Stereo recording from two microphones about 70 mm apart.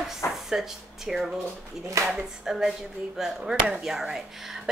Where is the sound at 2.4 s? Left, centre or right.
Centre.